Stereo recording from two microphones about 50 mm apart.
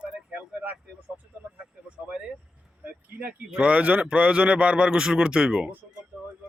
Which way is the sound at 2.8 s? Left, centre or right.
Right.